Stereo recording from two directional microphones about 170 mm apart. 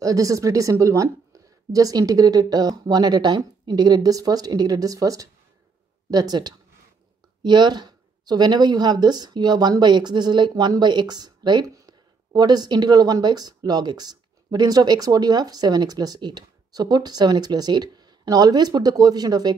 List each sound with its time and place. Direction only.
0.0 s speech: 20° right (ahead or behind)